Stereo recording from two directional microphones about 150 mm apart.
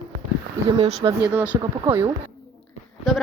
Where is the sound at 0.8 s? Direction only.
45° right (ahead or behind).